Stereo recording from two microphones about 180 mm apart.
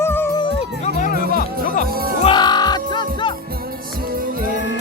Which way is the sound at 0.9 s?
50° left (ahead or behind).